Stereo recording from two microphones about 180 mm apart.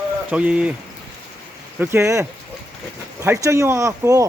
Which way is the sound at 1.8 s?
15° right (ahead or behind).